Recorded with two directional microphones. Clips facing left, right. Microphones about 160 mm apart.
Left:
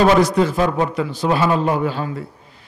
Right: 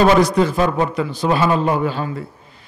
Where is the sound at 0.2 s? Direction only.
5° left (ahead or behind).